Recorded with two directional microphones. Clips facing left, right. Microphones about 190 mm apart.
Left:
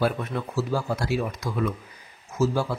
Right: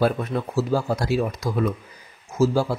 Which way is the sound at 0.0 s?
40° right (ahead or behind).